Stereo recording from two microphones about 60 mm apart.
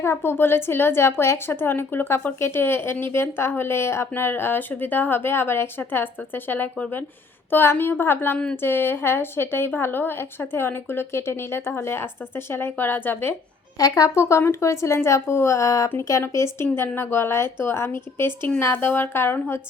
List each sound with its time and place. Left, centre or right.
0.0 s speech: left
13.7 s speech: left
16.3 s speech: left
16.7 s a woman's voice: left